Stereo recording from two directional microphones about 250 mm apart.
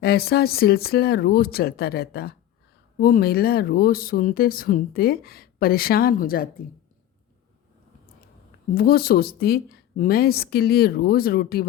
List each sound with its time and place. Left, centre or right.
0.0 s speech: left
8.7 s speech: left